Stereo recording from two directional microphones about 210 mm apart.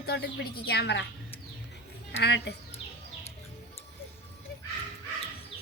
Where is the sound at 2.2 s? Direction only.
55° left (ahead or behind).